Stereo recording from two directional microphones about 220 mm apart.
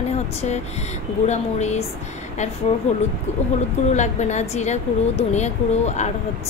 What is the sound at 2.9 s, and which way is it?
A woman's voice, 30° left (ahead or behind).